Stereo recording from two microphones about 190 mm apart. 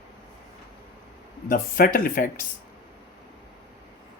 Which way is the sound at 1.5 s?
50° left (ahead or behind).